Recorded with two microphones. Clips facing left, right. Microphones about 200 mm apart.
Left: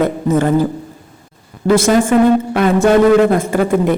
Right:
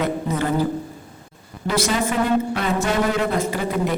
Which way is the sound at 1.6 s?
50° left (ahead or behind).